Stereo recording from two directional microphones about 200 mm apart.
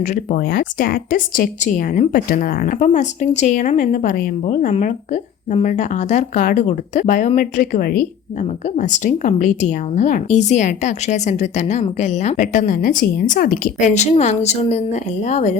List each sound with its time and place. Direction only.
0.0 s speech: 40° left (ahead or behind)
8.7 s speech: 35° left (ahead or behind)